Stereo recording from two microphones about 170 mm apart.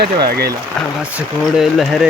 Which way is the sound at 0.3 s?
70° right (ahead or behind).